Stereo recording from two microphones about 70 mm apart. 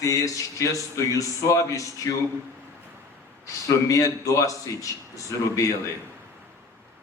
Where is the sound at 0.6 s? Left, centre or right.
Left.